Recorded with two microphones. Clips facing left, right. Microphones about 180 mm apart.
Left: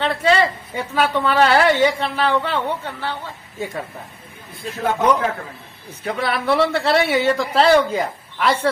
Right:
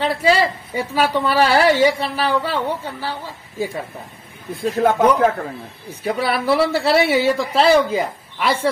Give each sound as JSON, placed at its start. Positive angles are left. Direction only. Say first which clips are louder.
{"t": 0.0, "sound": "a woman's voice", "louder": "even", "side_deg": -10}
{"t": 4.6, "sound": "a man's voice", "louder": "right 3 dB", "side_deg": -45}
{"t": 5.9, "sound": "speech", "louder": "right 2 dB", "side_deg": -10}